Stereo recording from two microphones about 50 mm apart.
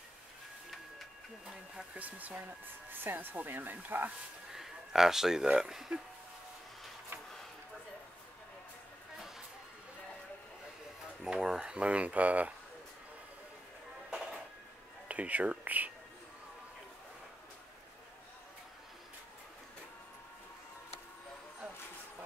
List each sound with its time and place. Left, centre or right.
2.0 s speech: right
4.5 s a sound: centre
5.6 s speech: centre
11.2 s speech: centre
14.1 s music: centre
15.0 s speech: right